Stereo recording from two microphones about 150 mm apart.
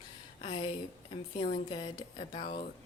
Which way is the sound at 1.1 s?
40° left (ahead or behind).